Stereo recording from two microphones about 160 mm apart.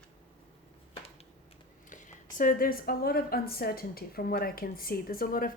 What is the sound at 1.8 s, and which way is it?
A woman's voice, 50° left (ahead or behind).